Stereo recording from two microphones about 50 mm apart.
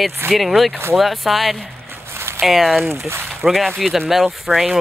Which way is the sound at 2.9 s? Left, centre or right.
Right.